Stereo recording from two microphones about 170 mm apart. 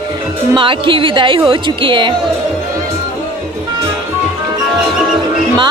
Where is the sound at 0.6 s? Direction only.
30° right (ahead or behind).